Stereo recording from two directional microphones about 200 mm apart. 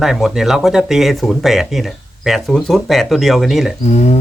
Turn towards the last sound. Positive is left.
turn(degrees=35)  # may be behind; listen again after turning